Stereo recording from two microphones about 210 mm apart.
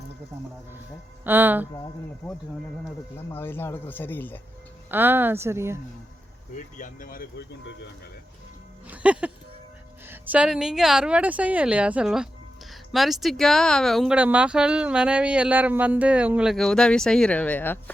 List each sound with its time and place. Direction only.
1.2 s speech: 10° right (ahead or behind)
3.3 s speech: 10° left (ahead or behind)
4.9 s speech: 10° right (ahead or behind)
6.7 s speech: 40° left (ahead or behind)
8.9 s speech: 5° right (ahead or behind)